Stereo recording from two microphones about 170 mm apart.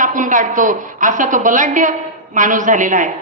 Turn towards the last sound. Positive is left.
turn(degrees=-50)  # may be behind; listen again after turning